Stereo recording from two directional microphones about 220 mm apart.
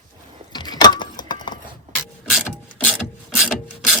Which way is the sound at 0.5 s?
20° left (ahead or behind).